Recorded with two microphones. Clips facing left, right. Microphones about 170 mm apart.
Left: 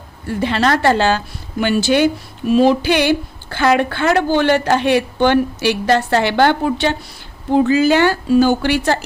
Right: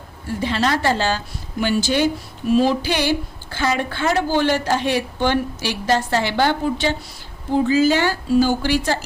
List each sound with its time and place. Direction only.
0.3 s a woman's voice: 65° left (ahead or behind)